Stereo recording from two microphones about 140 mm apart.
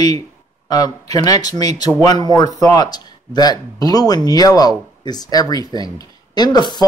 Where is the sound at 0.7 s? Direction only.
25° left (ahead or behind).